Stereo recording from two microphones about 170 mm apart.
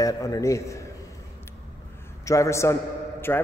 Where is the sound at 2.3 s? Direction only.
15° left (ahead or behind).